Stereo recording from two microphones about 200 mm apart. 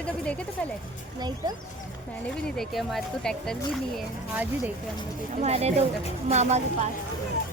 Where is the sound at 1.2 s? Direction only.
20° right (ahead or behind).